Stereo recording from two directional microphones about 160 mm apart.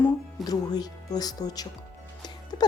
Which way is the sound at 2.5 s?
25° left (ahead or behind).